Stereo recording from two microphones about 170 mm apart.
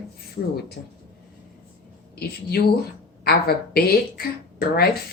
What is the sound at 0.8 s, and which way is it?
Speech, 55° left (ahead or behind).